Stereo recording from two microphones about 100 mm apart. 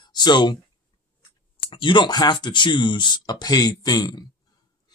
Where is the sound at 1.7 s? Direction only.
55° left (ahead or behind).